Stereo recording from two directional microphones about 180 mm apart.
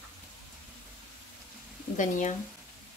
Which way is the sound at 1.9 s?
45° left (ahead or behind).